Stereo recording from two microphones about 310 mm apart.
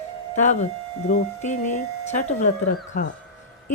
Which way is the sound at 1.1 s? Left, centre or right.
Left.